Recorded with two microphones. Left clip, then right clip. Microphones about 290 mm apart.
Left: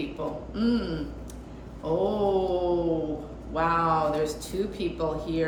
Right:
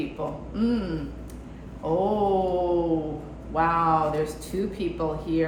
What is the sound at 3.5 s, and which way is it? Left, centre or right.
A woman's voice, centre.